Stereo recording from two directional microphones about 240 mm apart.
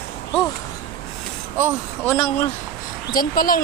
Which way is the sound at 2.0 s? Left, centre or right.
Centre.